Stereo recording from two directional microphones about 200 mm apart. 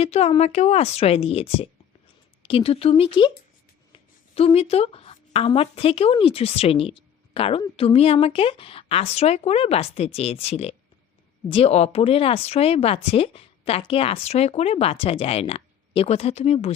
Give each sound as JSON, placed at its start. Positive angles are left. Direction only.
{"t": 0.0, "sound": "speech", "side_deg": 30}